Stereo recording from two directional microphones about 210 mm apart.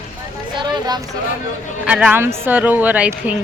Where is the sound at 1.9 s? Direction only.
5° right (ahead or behind).